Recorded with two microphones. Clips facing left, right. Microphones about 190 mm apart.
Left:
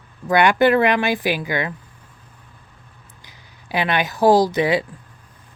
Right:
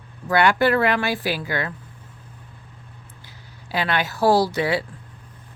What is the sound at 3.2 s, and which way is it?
Speech, 15° left (ahead or behind).